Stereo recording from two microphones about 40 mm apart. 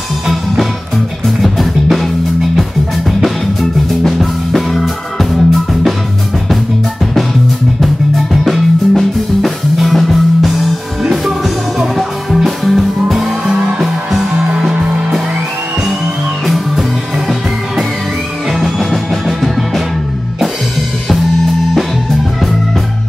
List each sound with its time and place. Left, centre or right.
1.2 s music: centre
4.0 s music: centre
7.8 s music: centre
13.6 s music: centre
16.4 s music: centre
18.5 s music: centre